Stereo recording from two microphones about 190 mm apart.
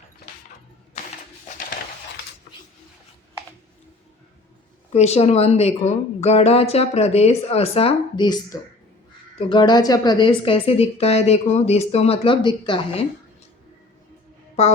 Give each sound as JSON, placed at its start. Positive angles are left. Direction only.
{"t": 4.9, "sound": "a woman's voice", "side_deg": 35}
{"t": 14.6, "sound": "a woman's voice", "side_deg": 35}